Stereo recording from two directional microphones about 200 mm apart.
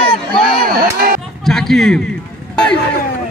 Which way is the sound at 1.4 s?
Centre (ahead or behind).